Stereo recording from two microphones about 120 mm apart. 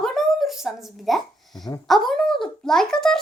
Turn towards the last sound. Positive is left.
turn(degrees=5)  # may be behind; listen again after turning